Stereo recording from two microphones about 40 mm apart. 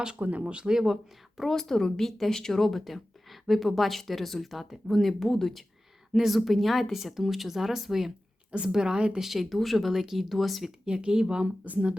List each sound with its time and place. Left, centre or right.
0.2 s speech: right
0.4 s speech: right
0.7 s speech: centre
1.4 s speech: centre
6.1 s speech: centre
8.7 s speech: centre
9.2 s speech: centre
10.8 s speech: right
11.6 s speech: right